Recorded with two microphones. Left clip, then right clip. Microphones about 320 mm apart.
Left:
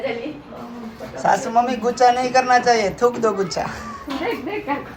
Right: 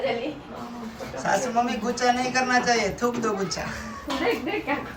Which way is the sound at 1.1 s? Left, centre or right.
Centre.